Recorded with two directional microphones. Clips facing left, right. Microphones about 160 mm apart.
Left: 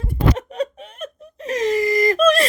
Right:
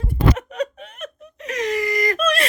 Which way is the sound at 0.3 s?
30° left (ahead or behind).